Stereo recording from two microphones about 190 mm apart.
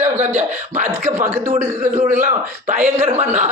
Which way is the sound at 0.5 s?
40° right (ahead or behind).